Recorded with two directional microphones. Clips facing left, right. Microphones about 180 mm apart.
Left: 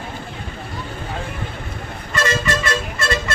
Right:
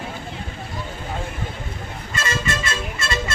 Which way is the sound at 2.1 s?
60° left (ahead or behind).